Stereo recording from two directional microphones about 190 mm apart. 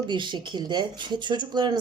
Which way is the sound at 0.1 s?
25° right (ahead or behind).